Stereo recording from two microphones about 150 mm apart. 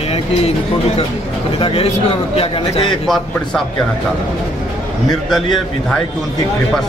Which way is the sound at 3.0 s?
Centre (ahead or behind).